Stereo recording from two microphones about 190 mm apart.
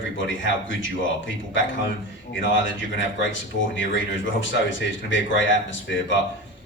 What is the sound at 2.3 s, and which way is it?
Speech, 80° left.